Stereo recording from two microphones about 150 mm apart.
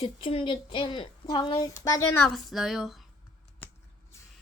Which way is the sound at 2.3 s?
Centre (ahead or behind).